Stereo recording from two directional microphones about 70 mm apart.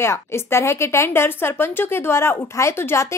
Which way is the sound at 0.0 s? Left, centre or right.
Left.